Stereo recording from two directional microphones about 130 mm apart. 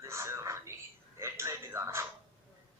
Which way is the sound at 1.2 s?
20° right (ahead or behind).